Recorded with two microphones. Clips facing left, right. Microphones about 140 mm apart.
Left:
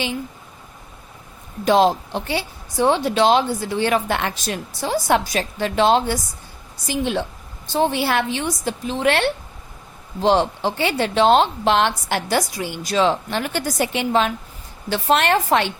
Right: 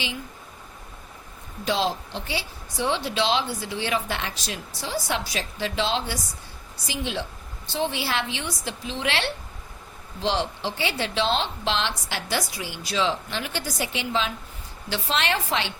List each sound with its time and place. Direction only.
1.6 s a woman's voice: 50° left (ahead or behind)